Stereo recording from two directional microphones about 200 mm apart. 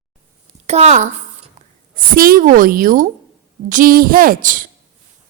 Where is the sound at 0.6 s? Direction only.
35° right (ahead or behind).